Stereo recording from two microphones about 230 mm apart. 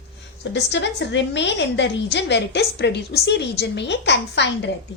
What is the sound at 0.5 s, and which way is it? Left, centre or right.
A woman's voice, left.